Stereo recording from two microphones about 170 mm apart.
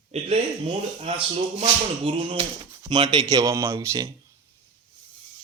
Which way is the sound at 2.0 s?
35° right (ahead or behind).